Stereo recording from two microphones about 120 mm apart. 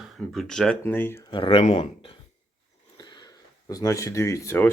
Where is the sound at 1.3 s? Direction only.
45° left (ahead or behind).